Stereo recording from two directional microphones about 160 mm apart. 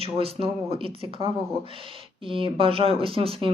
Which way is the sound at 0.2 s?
35° right (ahead or behind).